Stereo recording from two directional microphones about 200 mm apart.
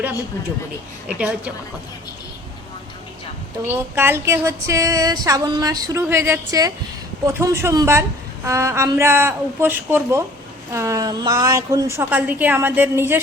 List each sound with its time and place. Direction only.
1.0 s a woman's voice: 5° right (ahead or behind)
3.7 s speech: 10° right (ahead or behind)